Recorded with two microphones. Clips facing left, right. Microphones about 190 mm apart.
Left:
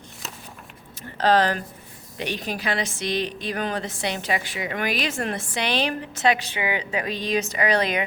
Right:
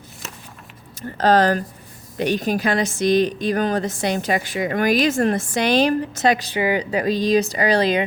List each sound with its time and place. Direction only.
1.2 s a woman's voice: 45° right (ahead or behind)